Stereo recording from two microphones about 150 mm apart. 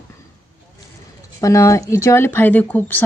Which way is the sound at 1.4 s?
20° left (ahead or behind).